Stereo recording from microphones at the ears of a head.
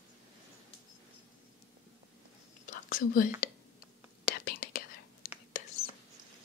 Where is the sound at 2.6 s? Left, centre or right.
Left.